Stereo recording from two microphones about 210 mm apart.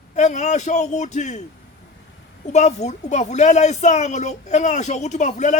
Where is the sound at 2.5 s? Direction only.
35° left (ahead or behind).